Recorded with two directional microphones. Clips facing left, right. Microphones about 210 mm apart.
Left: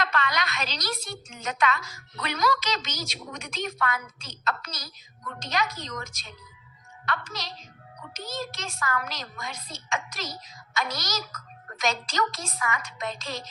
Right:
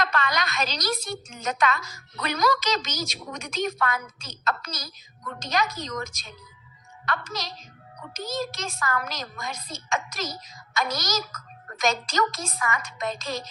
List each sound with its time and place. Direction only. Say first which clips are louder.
0.0 s a woman's voice: right 2 dB; 40° right (ahead or behind)